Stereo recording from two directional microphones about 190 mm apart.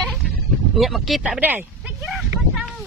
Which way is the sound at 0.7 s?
Centre (ahead or behind).